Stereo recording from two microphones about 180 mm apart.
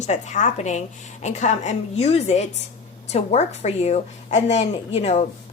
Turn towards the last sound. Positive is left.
turn(degrees=35)  # may be behind; listen again after turning